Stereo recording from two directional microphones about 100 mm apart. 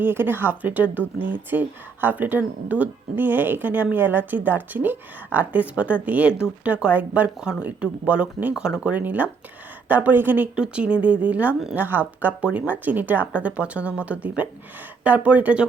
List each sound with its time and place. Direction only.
0.0 s speech: 20° right (ahead or behind)